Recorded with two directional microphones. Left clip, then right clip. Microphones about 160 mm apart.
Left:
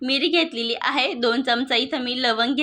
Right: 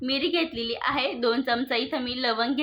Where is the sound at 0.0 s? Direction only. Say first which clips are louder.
Left 5 dB; 30° left (ahead or behind).